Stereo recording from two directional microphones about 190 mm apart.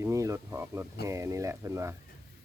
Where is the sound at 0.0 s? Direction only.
15° right (ahead or behind).